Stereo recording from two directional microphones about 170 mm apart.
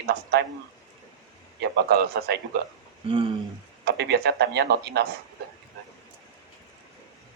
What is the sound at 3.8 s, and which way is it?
Speech, 75° right (ahead or behind).